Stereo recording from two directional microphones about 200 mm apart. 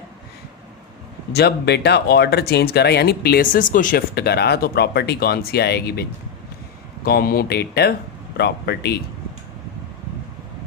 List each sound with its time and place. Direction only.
1.3 s speech: 55° left (ahead or behind)